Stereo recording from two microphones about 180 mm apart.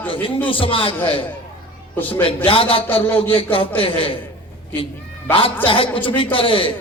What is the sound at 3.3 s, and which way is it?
Speech, 30° left (ahead or behind).